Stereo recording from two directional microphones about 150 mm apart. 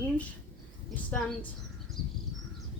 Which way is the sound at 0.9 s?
10° left (ahead or behind).